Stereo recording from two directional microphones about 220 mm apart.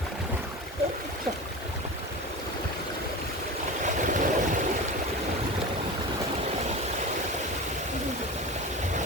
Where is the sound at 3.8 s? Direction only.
35° right (ahead or behind).